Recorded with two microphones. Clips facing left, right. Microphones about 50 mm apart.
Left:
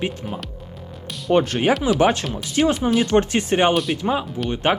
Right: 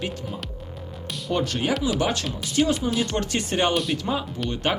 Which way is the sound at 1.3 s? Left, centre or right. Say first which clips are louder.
Left 7 dB; left.